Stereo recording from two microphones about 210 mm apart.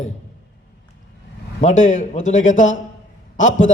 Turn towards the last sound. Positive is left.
turn(degrees=35)  # may be behind; listen again after turning